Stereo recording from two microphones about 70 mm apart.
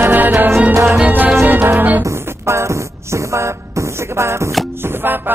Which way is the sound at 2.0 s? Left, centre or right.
Right.